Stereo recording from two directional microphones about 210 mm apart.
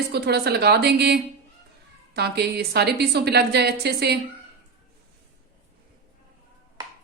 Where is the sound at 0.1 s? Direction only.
50° right (ahead or behind).